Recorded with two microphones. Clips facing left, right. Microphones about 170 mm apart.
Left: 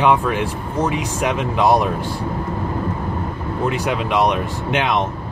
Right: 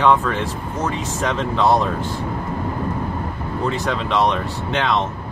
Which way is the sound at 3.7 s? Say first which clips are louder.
Left 1 dB; 15° left (ahead or behind).